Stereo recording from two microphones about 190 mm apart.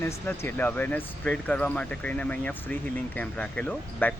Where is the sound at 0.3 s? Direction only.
10° left (ahead or behind).